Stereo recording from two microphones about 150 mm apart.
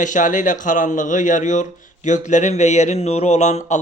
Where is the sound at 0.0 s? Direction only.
60° left (ahead or behind).